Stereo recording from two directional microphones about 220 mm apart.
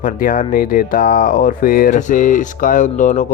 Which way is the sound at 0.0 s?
40° left (ahead or behind).